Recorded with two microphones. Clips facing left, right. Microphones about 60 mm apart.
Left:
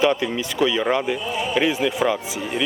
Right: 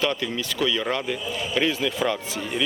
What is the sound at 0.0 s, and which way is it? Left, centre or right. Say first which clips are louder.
Speech: left 6 dB; centre.